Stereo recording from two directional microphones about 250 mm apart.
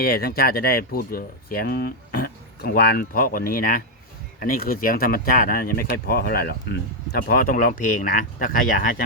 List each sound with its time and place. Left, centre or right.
0.0 s speech: left